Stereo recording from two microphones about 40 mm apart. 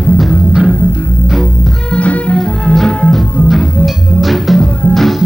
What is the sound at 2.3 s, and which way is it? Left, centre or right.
Music, centre.